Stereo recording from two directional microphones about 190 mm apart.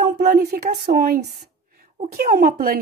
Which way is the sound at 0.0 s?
55° right (ahead or behind).